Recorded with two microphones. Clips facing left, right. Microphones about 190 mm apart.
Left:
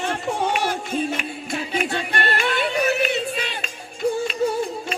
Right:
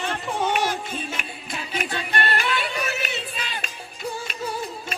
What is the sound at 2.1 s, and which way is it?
Yodeling, 50° left (ahead or behind).